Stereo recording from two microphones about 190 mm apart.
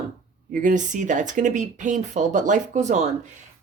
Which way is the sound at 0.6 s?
40° right (ahead or behind).